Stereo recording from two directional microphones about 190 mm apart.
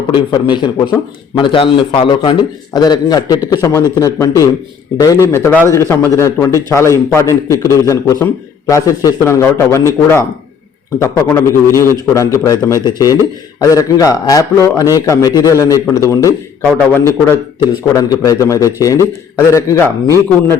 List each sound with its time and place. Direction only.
0.1 s a man's voice: 25° left (ahead or behind)